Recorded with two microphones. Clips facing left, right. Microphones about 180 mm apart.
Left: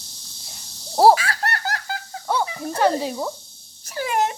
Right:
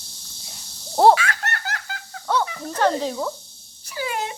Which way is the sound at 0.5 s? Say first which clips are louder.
Even; 5° left (ahead or behind).